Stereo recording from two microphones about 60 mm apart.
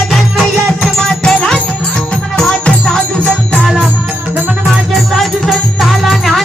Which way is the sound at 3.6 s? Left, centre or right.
Centre.